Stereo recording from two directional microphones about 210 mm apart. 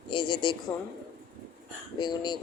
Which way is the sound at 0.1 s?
20° left (ahead or behind).